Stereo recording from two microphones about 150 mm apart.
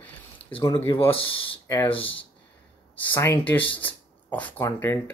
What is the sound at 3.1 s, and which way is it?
Speech, 15° left (ahead or behind).